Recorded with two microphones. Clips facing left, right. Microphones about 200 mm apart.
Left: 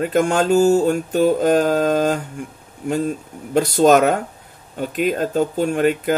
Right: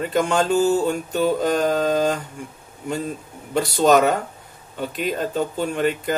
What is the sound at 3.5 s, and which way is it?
Speech, 45° left (ahead or behind).